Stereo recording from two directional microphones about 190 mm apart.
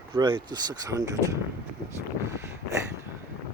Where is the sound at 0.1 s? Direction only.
25° right (ahead or behind).